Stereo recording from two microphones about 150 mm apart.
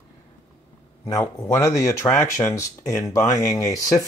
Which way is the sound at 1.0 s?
20° left (ahead or behind).